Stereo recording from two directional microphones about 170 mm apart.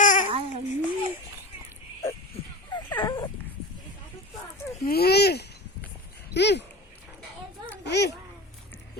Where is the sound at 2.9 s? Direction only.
30° left (ahead or behind).